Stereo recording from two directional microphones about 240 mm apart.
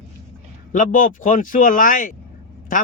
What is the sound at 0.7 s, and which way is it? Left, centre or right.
Speech, left.